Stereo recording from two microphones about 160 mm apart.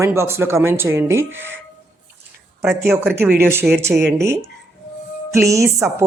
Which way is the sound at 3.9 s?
90° right.